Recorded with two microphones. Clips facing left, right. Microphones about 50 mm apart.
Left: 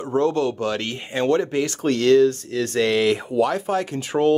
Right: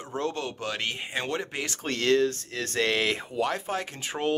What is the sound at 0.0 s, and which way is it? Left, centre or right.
Speech, left.